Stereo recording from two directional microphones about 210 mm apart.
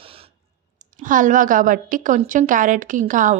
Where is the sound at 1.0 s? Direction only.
40° right (ahead or behind).